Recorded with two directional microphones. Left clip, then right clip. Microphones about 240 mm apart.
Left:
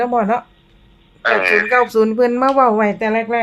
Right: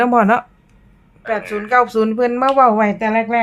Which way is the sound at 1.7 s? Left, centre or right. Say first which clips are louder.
Left 1 dB; centre.